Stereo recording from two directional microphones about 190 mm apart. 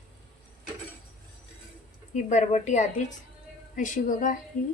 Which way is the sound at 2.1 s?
40° left (ahead or behind).